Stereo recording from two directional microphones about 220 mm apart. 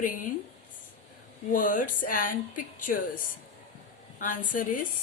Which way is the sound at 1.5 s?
40° left (ahead or behind).